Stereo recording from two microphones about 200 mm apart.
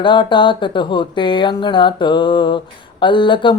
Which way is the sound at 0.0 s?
25° left (ahead or behind).